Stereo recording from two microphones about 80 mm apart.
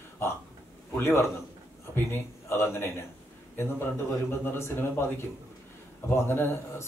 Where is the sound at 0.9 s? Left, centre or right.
Left.